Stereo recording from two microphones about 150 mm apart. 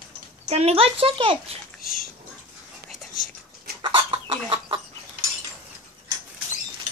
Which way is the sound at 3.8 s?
35° right (ahead or behind).